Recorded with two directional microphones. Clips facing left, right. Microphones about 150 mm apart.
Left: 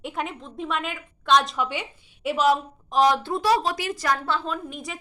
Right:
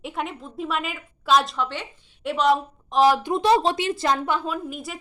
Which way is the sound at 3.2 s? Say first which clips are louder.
Right 3 dB; 20° right (ahead or behind).